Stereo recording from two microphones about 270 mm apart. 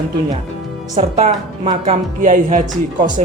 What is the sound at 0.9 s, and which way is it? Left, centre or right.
A woman's voice, right.